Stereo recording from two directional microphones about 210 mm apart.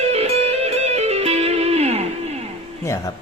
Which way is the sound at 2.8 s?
15° left (ahead or behind).